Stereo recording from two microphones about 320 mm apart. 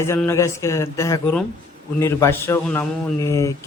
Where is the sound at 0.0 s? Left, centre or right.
Centre.